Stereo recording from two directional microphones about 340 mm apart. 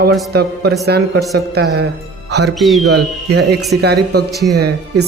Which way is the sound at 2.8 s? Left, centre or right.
Right.